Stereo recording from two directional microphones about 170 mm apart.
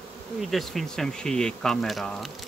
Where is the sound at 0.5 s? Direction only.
Centre (ahead or behind).